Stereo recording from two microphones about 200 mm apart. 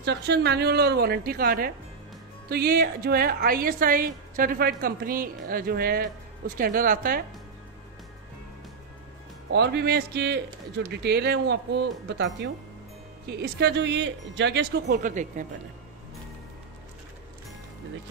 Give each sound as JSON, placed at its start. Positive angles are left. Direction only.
{"t": 0.0, "sound": "a woman's voice", "side_deg": -55}
{"t": 9.5, "sound": "a man's voice", "side_deg": -55}
{"t": 15.0, "sound": "speech", "side_deg": -40}